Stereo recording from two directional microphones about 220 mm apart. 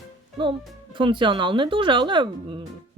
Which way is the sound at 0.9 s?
20° right (ahead or behind).